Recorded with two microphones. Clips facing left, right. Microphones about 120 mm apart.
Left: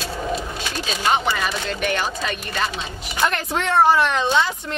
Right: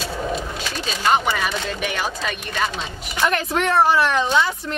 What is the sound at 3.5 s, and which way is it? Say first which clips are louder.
Speech: left 2 dB; 25° left (ahead or behind).